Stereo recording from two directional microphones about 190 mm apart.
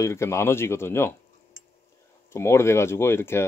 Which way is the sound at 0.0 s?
15° left (ahead or behind).